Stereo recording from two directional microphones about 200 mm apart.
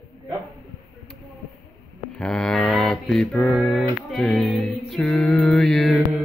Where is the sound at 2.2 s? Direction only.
5° left (ahead or behind).